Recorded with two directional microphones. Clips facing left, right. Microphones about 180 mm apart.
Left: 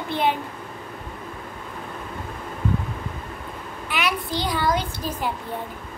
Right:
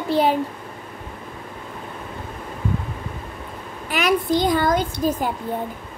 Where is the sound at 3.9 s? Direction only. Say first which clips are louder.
Right 7 dB; 45° right (ahead or behind).